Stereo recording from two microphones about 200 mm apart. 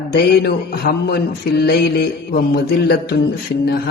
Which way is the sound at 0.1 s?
50° left (ahead or behind).